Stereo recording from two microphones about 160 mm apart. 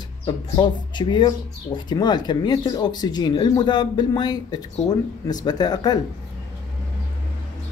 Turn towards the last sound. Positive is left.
turn(degrees=25)  # may be behind; listen again after turning